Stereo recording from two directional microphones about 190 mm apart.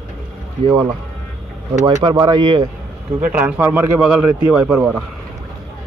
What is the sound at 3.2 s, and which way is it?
A man's voice, 10° right (ahead or behind).